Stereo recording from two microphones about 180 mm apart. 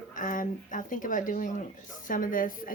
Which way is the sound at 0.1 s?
45° left (ahead or behind).